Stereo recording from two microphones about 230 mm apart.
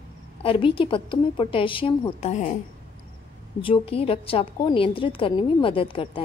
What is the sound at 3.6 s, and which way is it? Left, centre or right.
A woman's voice, left.